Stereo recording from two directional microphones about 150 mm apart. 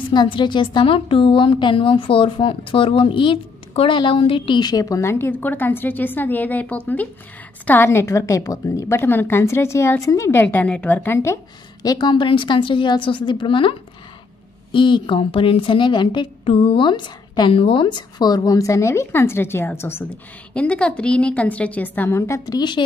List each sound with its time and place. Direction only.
0.1 s a woman's voice: 30° left (ahead or behind); by 11.3 s 15° left (ahead or behind)
11.8 s a woman's voice: 25° left (ahead or behind)